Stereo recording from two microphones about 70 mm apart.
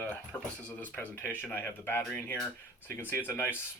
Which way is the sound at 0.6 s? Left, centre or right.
Centre.